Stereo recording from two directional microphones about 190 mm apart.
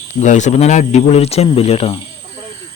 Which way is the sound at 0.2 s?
40° left (ahead or behind).